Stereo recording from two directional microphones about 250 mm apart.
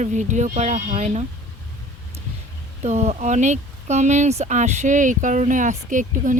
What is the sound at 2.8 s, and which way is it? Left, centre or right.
Speech, right.